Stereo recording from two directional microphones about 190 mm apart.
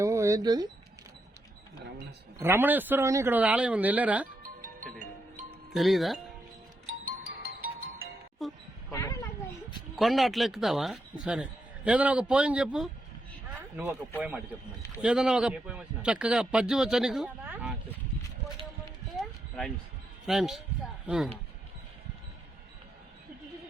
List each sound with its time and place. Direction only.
0.0 s a sound: 15° right (ahead or behind)
2.4 s speech: 10° right (ahead or behind)
5.7 s a man's voice: centre (ahead or behind)
6.8 s music: 90° right
8.4 s a man's voice: centre (ahead or behind)
8.9 s a sound: 15° left (ahead or behind)
9.9 s a man's voice: centre (ahead or behind)
19.1 s a sound: 5° left (ahead or behind)
20.2 s a man's voice: centre (ahead or behind)